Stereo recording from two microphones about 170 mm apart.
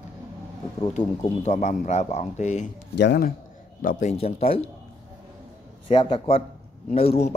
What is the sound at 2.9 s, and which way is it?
Speech, 75° left (ahead or behind).